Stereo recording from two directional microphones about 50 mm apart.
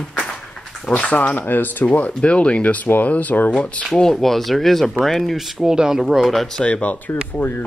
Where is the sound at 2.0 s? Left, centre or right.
Left.